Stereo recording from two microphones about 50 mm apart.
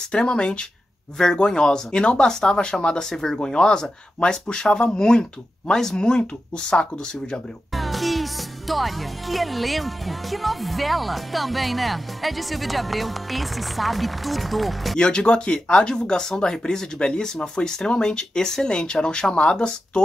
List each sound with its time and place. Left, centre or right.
0.1 s speech: centre
7.7 s music: centre
15.0 s speech: centre